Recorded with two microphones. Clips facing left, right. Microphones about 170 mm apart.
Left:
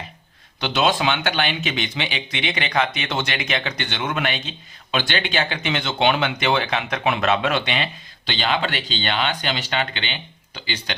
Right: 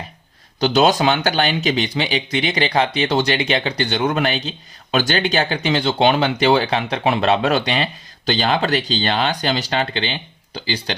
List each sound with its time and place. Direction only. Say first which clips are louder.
0.6 s speech: right 5 dB; 40° right (ahead or behind)